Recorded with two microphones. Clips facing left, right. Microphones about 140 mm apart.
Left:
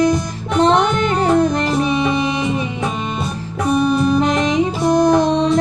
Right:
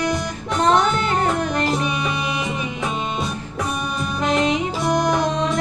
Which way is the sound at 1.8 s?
30° left (ahead or behind).